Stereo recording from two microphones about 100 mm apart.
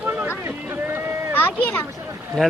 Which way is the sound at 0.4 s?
25° right (ahead or behind).